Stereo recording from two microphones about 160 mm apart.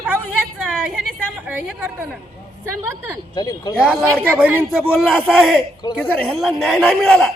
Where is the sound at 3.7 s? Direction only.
Centre (ahead or behind).